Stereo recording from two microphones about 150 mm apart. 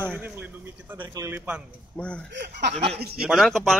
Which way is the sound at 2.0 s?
10° left (ahead or behind).